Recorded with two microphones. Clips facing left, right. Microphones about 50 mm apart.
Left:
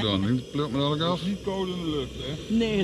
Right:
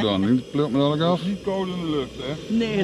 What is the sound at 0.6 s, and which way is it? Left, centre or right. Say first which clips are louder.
Speech: right 4 dB; centre.